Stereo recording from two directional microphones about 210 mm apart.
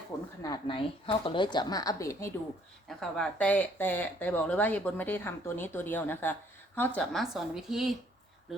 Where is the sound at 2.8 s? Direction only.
5° left (ahead or behind).